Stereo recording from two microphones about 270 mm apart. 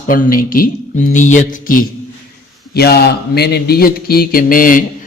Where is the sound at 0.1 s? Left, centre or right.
Left.